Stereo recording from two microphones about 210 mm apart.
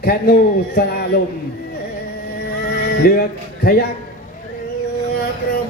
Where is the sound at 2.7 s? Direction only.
45° left (ahead or behind).